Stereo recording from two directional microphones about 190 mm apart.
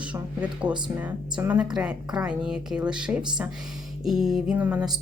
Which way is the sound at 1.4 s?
5° right (ahead or behind).